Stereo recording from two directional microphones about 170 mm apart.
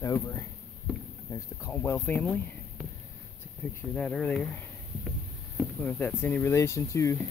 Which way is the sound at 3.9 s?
5° left (ahead or behind).